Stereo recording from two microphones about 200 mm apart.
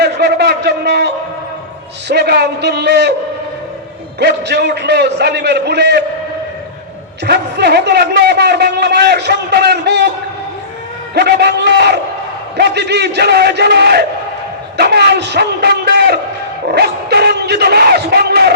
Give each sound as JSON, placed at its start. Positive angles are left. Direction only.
{"t": 0.0, "sound": "a sound", "side_deg": -55}
{"t": 2.0, "sound": "a man's voice", "side_deg": -55}
{"t": 4.2, "sound": "a man's voice", "side_deg": -55}
{"t": 7.3, "sound": "a man's voice", "side_deg": -60}
{"t": 11.1, "sound": "a man's voice", "side_deg": -55}